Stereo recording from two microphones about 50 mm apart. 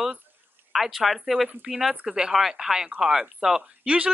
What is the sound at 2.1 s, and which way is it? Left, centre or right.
Speech, centre.